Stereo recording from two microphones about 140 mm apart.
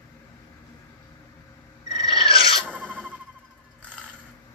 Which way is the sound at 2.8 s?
10° left (ahead or behind).